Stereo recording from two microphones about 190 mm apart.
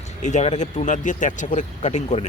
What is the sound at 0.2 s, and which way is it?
Speech, 40° left (ahead or behind).